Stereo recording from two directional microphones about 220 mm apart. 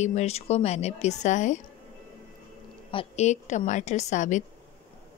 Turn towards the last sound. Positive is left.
turn(degrees=35)  # may be behind; listen again after turning